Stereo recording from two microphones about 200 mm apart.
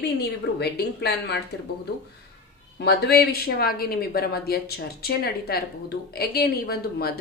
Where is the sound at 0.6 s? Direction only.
55° left (ahead or behind).